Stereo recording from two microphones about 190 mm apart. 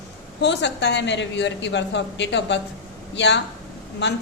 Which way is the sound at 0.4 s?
65° left (ahead or behind).